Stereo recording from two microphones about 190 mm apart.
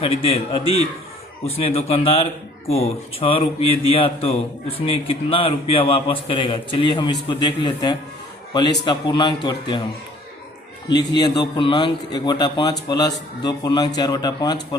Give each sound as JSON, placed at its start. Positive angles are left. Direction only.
{"t": 0.0, "sound": "a man's voice", "side_deg": 30}
{"t": 10.8, "sound": "a man's voice", "side_deg": 20}